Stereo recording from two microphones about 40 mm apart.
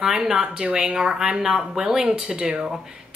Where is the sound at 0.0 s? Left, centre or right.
Centre.